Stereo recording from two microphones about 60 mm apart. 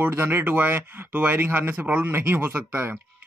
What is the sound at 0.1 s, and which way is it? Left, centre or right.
Speech, right.